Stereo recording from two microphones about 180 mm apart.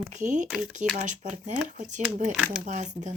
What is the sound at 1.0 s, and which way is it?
Speech, 45° right (ahead or behind).